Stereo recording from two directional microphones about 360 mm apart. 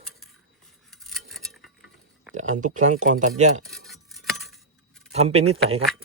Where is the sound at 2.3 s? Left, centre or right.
Centre.